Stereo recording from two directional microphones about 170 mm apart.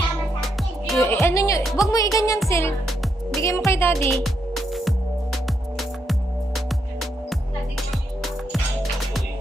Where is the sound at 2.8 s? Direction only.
Centre (ahead or behind).